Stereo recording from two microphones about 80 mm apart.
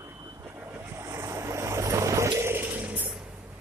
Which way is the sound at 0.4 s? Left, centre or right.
Right.